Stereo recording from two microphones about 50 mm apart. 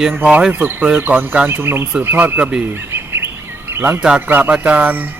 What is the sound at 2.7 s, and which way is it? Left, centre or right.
Bird, right.